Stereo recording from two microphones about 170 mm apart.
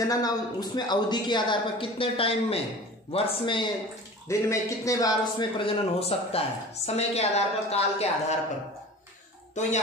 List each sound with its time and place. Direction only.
0.0 s a woman's voice: 20° left (ahead or behind)
4.3 s a man's voice: 20° left (ahead or behind); by 8.4 s 40° left (ahead or behind)
9.6 s a woman's voice: 45° left (ahead or behind)